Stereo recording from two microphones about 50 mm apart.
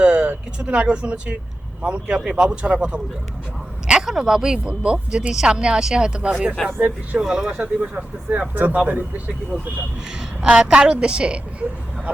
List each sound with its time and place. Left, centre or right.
0.0 s a sound: right
0.7 s speech: right
6.6 s speech: centre
7.2 s speech: centre
7.5 s speech: right
10.2 s speech: centre